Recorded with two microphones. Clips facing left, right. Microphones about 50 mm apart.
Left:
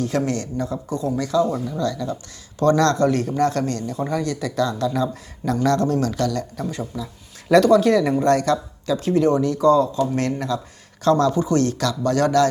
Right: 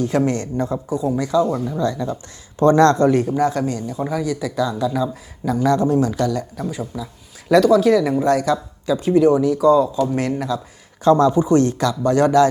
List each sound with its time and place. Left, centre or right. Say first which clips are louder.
0.3 s speech: right 3 dB; right
1.0 s speech: right 2 dB; centre
3.2 s speech: right 1 dB; centre
11.0 s speech: right 4 dB; right